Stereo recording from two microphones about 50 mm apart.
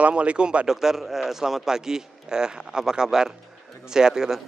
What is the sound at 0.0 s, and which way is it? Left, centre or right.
Speech, right.